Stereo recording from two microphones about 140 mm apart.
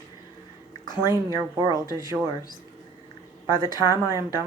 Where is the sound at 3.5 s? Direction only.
25° right (ahead or behind).